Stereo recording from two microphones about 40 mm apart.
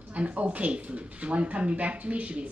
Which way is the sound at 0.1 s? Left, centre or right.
Right.